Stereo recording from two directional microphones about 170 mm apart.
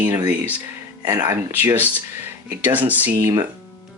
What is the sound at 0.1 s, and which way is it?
Speech, 15° right (ahead or behind).